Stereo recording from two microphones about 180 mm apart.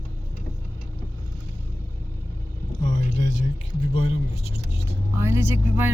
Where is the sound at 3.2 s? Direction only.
40° left (ahead or behind).